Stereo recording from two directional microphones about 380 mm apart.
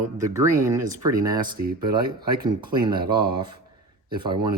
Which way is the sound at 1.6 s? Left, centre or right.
Right.